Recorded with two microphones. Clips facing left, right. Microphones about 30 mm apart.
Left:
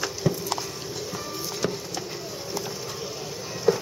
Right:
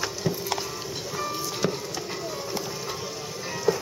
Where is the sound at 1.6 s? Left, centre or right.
Centre.